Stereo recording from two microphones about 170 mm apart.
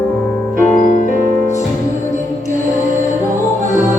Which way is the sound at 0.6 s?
45° left (ahead or behind).